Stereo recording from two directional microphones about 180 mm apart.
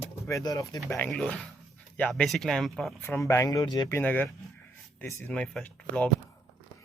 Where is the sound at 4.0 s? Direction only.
10° left (ahead or behind).